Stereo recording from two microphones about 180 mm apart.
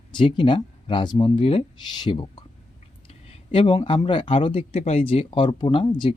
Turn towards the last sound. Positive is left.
turn(degrees=25)  # may be behind; listen again after turning